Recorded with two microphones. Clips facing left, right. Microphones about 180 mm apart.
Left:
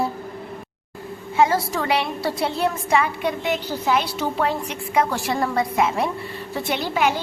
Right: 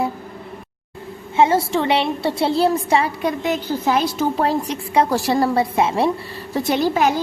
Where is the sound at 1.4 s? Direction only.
25° right (ahead or behind).